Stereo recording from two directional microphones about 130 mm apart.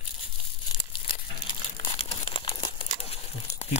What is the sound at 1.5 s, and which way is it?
Crumpling, 40° left (ahead or behind).